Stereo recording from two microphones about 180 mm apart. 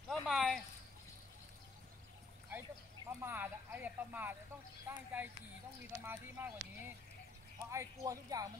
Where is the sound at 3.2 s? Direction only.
10° right (ahead or behind).